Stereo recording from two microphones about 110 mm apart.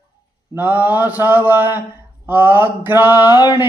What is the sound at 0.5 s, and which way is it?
Mantra, 15° right (ahead or behind).